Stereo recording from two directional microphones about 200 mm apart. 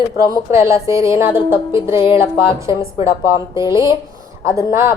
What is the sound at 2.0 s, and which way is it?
Music, 25° left (ahead or behind).